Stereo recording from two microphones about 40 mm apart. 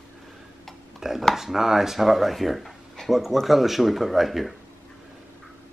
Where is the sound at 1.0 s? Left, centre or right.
Centre.